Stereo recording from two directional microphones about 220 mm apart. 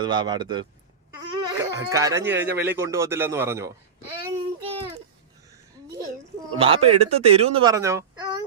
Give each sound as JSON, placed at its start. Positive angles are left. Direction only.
{"t": 0.0, "sound": "speech", "side_deg": -20}
{"t": 4.6, "sound": "a sound", "side_deg": -25}
{"t": 6.6, "sound": "speech", "side_deg": -25}